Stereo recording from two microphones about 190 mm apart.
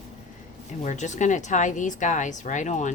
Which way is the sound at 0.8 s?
40° left (ahead or behind).